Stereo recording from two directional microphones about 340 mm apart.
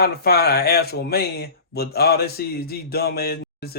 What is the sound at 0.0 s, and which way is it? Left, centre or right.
Speech, left.